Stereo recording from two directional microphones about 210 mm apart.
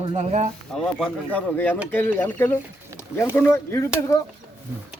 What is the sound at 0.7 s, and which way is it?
Speech, 5° left (ahead or behind).